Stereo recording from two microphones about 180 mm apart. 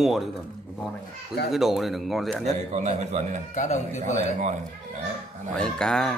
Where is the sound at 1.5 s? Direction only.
Centre (ahead or behind).